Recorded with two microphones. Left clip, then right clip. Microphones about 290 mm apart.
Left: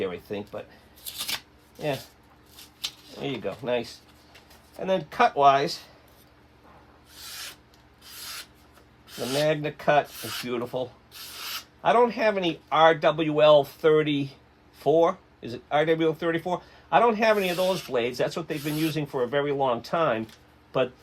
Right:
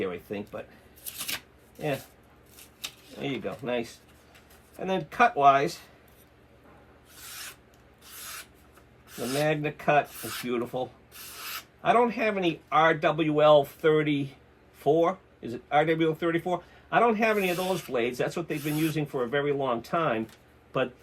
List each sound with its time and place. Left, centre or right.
0.0 s speech: left
3.2 s speech: left
9.1 s speech: left
11.8 s speech: left